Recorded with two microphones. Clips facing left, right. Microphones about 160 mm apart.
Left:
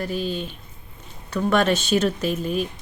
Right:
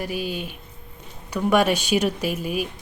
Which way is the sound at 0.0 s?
10° right (ahead or behind).